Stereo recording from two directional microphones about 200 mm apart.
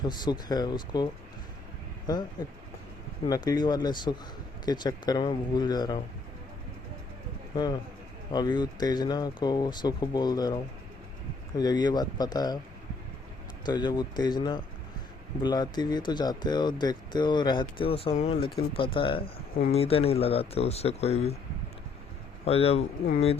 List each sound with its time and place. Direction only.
0.0 s speech: 20° left (ahead or behind)
2.1 s speech: 20° left (ahead or behind)
3.2 s speech: 20° left (ahead or behind)
7.5 s speech: 20° left (ahead or behind)
13.7 s speech: 20° left (ahead or behind)
22.4 s speech: 30° left (ahead or behind)